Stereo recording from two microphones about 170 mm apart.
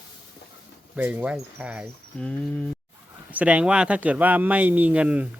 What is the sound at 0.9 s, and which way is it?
Speech, 10° right (ahead or behind).